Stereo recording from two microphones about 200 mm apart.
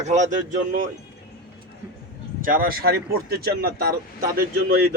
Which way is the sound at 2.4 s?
45° right (ahead or behind).